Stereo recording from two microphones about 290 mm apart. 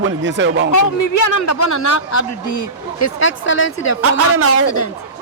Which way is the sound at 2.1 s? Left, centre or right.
Left.